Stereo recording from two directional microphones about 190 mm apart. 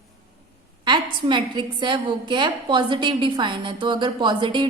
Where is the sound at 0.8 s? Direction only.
25° right (ahead or behind).